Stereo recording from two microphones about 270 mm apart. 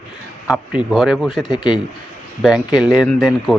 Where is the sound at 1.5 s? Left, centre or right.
Centre.